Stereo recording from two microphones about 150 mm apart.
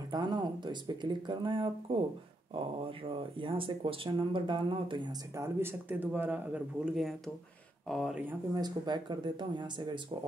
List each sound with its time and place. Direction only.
0.1 s speech: 30° right (ahead or behind)
3.1 s speech: 35° right (ahead or behind)
5.3 s speech: 15° right (ahead or behind); by 8.2 s centre (ahead or behind)
8.5 s speech: 30° right (ahead or behind)